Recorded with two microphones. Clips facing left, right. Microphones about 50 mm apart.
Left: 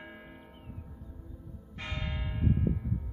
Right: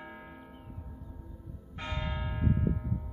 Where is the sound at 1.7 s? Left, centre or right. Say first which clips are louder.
Right 2 dB; centre.